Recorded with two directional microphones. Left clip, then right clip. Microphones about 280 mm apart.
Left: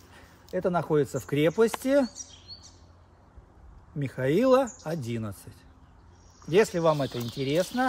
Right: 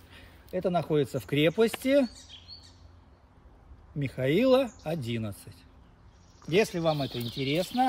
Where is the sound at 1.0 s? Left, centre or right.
Left.